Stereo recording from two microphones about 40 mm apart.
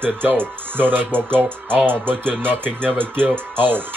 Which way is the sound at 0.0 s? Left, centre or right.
Right.